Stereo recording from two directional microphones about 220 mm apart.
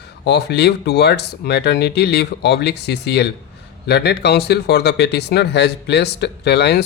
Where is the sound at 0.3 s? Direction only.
50° left (ahead or behind).